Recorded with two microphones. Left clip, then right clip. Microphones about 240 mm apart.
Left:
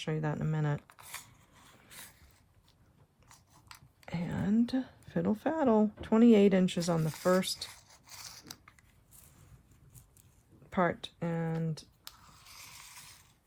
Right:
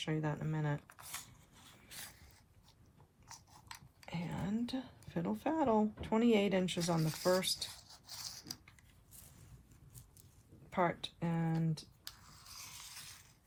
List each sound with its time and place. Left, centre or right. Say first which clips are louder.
0.0 s speech: left 3 dB; left
0.8 s speech: left 2 dB; centre
1.1 s mechanisms: left 3 dB; centre
1.9 s a sound: right 1 dB; centre
4.0 s speech: left 6 dB; left
7.7 s a sound: even; centre
10.7 s speech: left 4 dB; left
12.0 s ratchet: left 1 dB; centre